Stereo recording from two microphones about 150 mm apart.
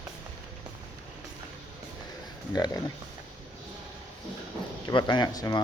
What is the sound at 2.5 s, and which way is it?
Speech, 25° left (ahead or behind).